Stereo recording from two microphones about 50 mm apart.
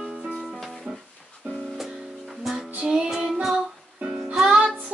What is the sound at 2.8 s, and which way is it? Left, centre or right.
Music, centre.